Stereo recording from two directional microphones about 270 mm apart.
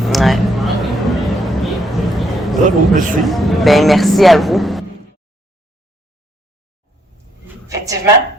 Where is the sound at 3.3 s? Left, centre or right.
Centre.